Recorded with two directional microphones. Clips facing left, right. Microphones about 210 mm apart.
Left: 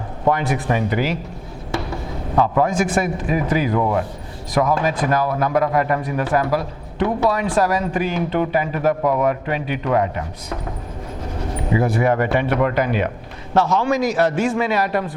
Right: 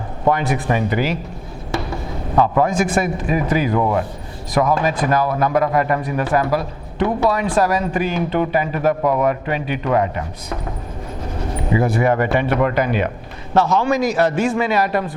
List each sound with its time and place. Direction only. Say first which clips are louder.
0.3 s a man's voice: right 1 dB; 15° right (ahead or behind)